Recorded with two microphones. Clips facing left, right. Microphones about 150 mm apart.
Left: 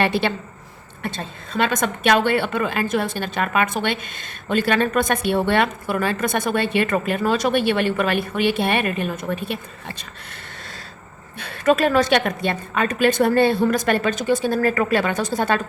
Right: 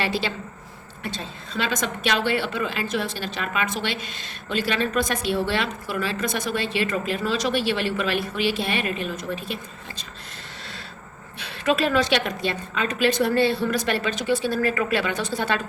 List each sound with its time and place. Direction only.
0.0 s a woman's voice: 55° left (ahead or behind)
11.3 s a woman's voice: 50° left (ahead or behind)